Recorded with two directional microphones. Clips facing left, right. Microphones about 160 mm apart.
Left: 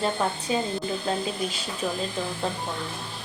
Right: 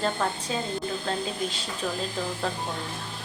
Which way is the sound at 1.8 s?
10° left (ahead or behind).